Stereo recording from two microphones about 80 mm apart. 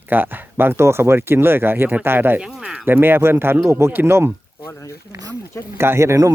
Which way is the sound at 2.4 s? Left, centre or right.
Centre.